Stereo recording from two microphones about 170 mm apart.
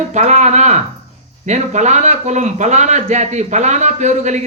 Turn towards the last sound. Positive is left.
turn(degrees=-40)  # may be behind; listen again after turning